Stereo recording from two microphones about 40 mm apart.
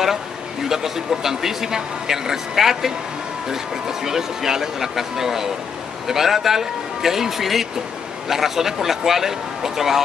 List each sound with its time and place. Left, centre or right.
0.7 s speech: centre